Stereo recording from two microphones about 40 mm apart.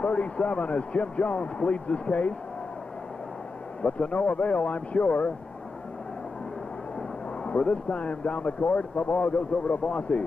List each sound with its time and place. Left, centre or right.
0.0 s speech: left
3.8 s speech: left
7.0 s speech: left